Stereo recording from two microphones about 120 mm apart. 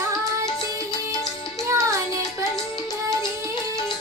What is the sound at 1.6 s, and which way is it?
Music, 25° right (ahead or behind).